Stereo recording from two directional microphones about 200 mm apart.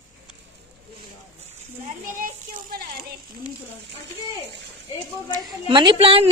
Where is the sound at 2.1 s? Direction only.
40° right (ahead or behind).